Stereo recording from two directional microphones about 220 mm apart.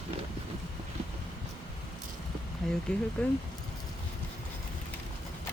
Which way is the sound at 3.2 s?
5° left (ahead or behind).